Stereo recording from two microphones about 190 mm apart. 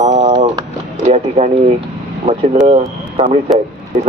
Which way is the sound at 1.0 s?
35° right (ahead or behind).